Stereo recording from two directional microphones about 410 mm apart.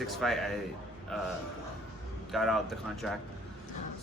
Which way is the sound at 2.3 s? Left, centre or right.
Centre.